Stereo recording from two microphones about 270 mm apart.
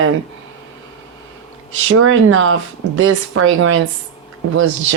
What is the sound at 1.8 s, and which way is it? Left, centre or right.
Speech, right.